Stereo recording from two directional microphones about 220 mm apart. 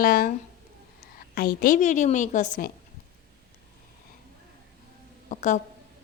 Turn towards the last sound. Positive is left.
turn(degrees=35)  # may be behind; listen again after turning